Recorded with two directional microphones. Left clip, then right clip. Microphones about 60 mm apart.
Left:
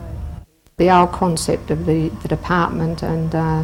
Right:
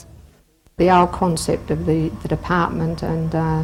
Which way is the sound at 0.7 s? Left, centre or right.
Centre.